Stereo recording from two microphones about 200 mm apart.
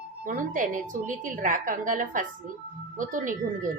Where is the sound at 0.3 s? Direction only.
40° right (ahead or behind).